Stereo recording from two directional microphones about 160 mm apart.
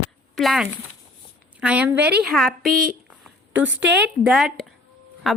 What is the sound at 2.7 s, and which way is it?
Speech, 60° right (ahead or behind).